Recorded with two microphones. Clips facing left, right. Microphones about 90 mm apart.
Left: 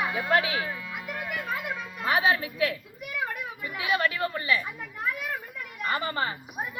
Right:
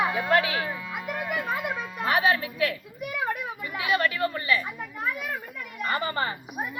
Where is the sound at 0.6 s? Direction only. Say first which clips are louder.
Right 3 dB; 10° right (ahead or behind).